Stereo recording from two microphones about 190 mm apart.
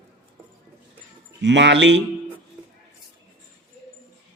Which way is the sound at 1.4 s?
70° right (ahead or behind).